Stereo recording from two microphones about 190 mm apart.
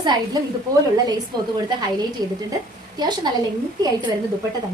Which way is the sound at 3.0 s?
20° right (ahead or behind).